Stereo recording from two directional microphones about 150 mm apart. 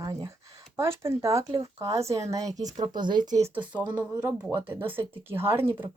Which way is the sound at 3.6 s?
10° right (ahead or behind).